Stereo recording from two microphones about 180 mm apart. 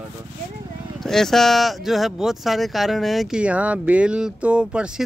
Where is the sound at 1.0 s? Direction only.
Centre (ahead or behind).